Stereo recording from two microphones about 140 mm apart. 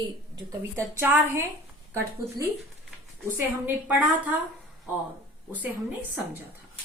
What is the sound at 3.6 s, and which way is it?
Speech, 10° right (ahead or behind).